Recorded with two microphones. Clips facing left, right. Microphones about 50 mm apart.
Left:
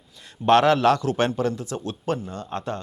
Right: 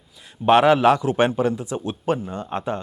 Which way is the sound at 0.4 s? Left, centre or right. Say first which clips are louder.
Right 2 dB; centre.